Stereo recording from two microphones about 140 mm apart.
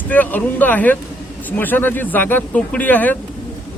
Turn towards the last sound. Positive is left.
turn(degrees=10)  # may be behind; listen again after turning